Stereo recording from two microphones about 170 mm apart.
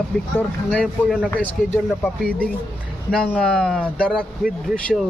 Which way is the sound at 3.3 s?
5° left (ahead or behind).